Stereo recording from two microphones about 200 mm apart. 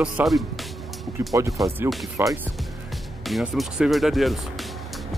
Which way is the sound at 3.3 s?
Centre (ahead or behind).